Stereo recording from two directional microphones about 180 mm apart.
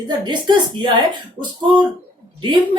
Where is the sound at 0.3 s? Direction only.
25° right (ahead or behind).